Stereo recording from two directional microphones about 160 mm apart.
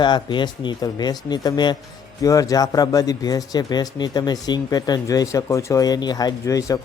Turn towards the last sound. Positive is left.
turn(degrees=20)  # may be behind; listen again after turning